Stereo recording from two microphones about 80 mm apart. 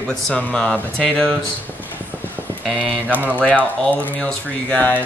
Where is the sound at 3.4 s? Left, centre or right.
Centre.